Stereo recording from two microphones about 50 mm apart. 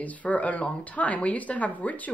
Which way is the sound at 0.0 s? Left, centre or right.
Left.